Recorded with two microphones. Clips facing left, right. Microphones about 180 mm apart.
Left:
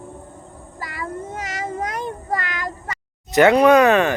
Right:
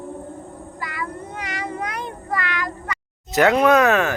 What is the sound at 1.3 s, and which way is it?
Meow, 45° left (ahead or behind).